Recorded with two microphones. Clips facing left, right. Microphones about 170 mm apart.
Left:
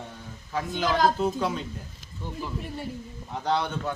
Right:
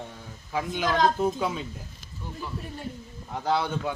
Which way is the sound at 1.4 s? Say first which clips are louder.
Left 1 dB; 5° right (ahead or behind).